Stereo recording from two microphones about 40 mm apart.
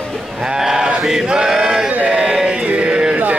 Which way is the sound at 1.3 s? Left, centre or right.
Centre.